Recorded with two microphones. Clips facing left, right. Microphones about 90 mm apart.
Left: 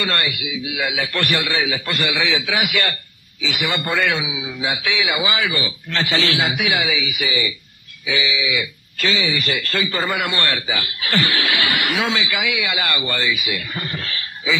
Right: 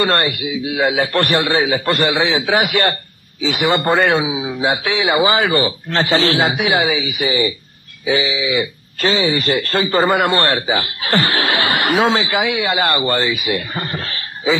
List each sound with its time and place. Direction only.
0.0 s a man's voice: 40° right (ahead or behind)